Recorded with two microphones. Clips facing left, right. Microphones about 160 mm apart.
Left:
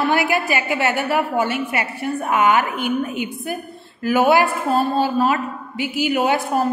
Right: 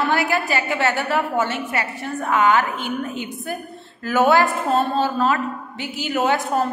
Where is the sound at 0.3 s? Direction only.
15° left (ahead or behind).